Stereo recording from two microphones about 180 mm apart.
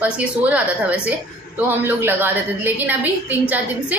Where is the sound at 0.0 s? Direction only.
10° right (ahead or behind).